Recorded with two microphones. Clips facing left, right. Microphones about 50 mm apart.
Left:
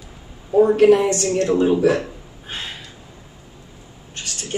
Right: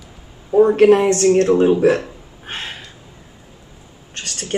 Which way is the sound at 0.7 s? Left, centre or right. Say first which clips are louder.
Right 2 dB; right.